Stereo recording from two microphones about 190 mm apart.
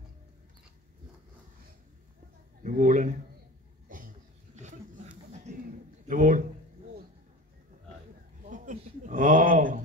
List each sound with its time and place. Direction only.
2.6 s speech: 45° right (ahead or behind)
3.9 s cough: 45° right (ahead or behind)
4.6 s chuckle: 40° right (ahead or behind)
6.0 s speech: 45° right (ahead or behind)
8.5 s a sound: 40° right (ahead or behind)